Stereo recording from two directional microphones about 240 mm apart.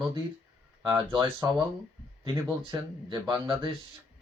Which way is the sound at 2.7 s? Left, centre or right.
Centre.